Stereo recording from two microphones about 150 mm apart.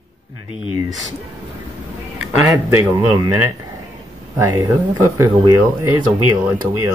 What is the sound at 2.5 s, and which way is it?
Speech, 20° right (ahead or behind).